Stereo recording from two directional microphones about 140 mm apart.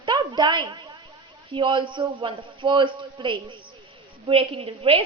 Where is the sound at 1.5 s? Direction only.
35° right (ahead or behind).